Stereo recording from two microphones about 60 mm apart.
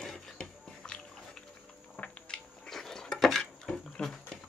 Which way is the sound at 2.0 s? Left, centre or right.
Left.